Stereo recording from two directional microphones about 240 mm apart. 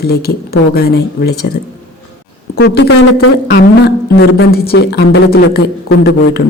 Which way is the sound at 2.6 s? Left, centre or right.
Left.